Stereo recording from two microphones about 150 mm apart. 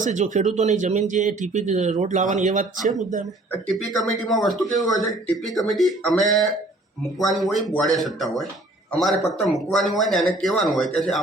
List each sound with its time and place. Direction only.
0.0 s speech: 55° right (ahead or behind)
3.8 s speech: centre (ahead or behind)
4.8 s speech: 25° left (ahead or behind)
5.0 s speech: centre (ahead or behind)